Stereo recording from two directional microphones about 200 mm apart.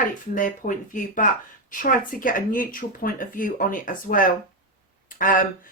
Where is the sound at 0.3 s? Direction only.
40° left (ahead or behind).